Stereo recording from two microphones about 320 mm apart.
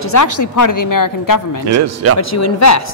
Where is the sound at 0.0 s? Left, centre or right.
Left.